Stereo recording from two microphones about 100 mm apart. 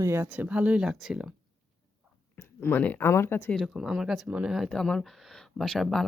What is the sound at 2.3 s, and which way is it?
Speech, 20° left (ahead or behind).